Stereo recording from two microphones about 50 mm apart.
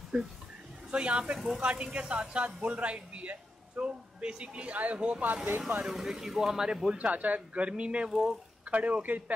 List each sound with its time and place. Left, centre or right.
0.1 s a man's voice: right
5.9 s speech: centre
7.0 s a man's voice: right
8.1 s speech: centre
8.6 s a man's voice: right